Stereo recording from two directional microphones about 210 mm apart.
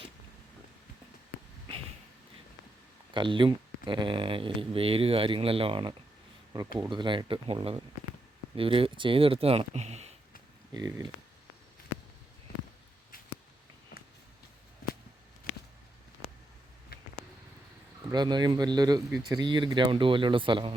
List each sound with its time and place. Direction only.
3.2 s speech: 25° right (ahead or behind)
10.8 s speech: 20° right (ahead or behind)
12.5 s a sound: 45° left (ahead or behind)
18.1 s speech: 20° right (ahead or behind)